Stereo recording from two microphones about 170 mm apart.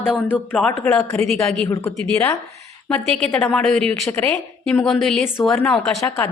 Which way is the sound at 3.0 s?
Centre (ahead or behind).